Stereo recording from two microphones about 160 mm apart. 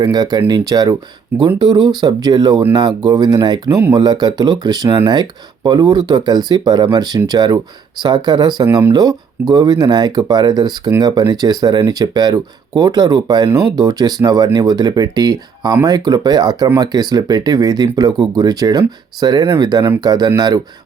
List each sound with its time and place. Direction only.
0.0 s speech: 25° right (ahead or behind)